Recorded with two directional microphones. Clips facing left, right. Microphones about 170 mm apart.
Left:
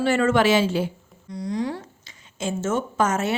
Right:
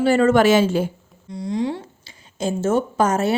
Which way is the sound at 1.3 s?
25° right (ahead or behind).